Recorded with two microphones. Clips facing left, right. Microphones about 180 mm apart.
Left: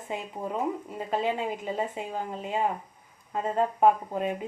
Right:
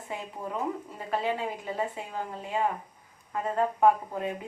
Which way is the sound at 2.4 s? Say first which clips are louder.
Even; 20° left (ahead or behind).